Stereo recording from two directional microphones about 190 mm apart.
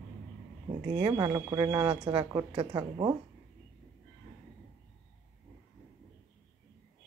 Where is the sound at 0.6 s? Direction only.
25° right (ahead or behind).